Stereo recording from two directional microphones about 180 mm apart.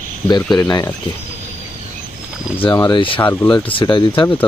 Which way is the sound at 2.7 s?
15° left (ahead or behind).